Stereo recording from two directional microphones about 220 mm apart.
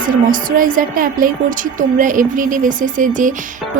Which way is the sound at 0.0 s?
40° right (ahead or behind).